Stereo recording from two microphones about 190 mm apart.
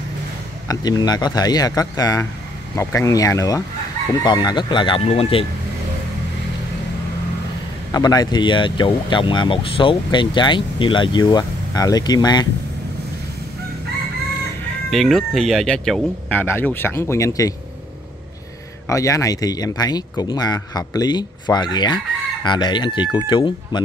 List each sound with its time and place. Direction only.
0.7 s speech: 20° left (ahead or behind)
7.9 s speech: 20° left (ahead or behind)
14.9 s speech: centre (ahead or behind); by 17.6 s 15° left (ahead or behind)
18.9 s speech: 15° left (ahead or behind)